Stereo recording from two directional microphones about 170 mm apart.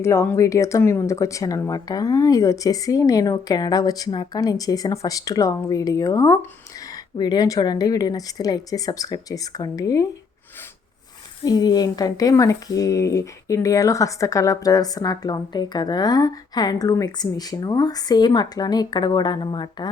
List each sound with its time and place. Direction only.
0.0 s speech: 15° left (ahead or behind)
11.4 s speech: 25° left (ahead or behind)